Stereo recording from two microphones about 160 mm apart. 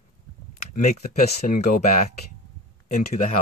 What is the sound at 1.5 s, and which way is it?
Speech, 55° left (ahead or behind).